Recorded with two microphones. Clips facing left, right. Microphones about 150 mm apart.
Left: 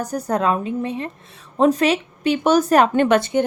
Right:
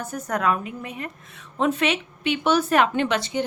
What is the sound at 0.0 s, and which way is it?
A woman's voice, 35° left (ahead or behind).